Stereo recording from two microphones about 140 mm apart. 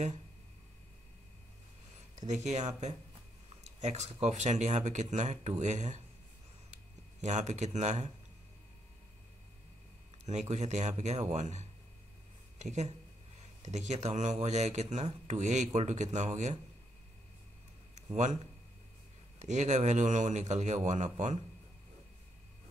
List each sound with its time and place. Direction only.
2.2 s speech: 55° right (ahead or behind)
7.2 s speech: 55° right (ahead or behind)
10.2 s speech: 55° right (ahead or behind)
18.1 s speech: 55° right (ahead or behind)